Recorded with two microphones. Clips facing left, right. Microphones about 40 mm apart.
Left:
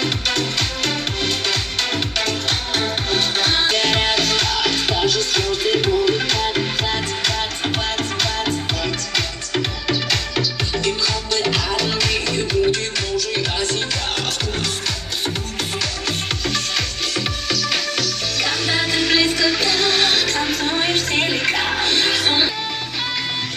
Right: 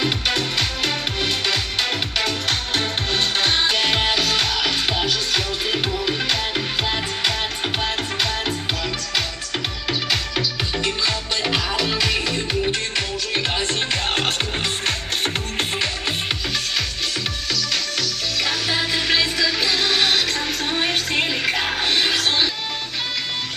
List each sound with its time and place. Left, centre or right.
0.0 s music: centre
8.8 s music: centre
10.8 s music: centre
13.3 s music: right
18.4 s music: centre
22.2 s music: centre